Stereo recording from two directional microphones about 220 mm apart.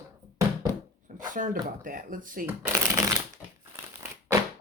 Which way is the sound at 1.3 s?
35° right (ahead or behind).